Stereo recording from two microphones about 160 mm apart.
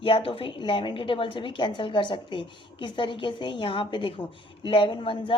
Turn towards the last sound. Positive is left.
turn(degrees=30)  # may be behind; listen again after turning